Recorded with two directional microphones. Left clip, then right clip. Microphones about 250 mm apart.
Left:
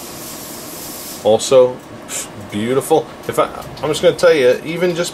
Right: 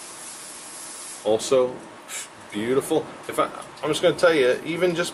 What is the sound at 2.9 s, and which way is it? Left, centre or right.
Speech, right.